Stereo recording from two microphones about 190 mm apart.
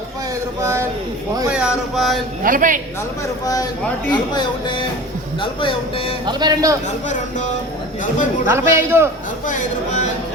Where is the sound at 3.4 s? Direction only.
20° left (ahead or behind).